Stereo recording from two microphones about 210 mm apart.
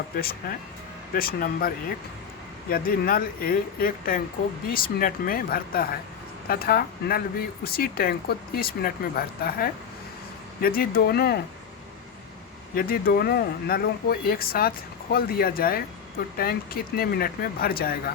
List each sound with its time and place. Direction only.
0.2 s speech: 45° left (ahead or behind)
12.7 s speech: 45° left (ahead or behind)